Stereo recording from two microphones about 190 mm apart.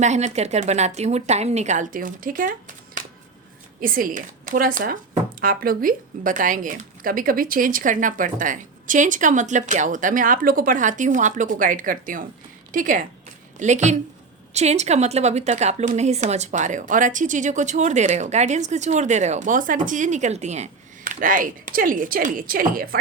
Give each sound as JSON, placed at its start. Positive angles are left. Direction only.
{"t": 0.0, "sound": "a woman's voice", "side_deg": -35}